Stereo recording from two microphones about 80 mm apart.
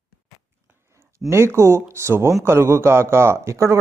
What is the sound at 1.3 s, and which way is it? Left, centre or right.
Speech, right.